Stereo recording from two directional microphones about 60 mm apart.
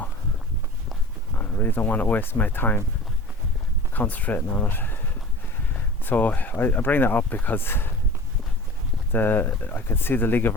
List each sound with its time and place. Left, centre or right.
1.4 s speech: left
3.9 s speech: left
6.1 s speech: left
9.1 s speech: left